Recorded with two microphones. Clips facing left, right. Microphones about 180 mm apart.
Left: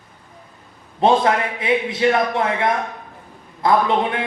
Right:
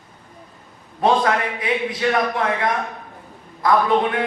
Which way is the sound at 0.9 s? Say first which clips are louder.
Left 2 dB; 25° left (ahead or behind).